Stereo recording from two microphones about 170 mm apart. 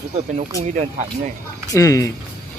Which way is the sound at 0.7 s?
45° right (ahead or behind).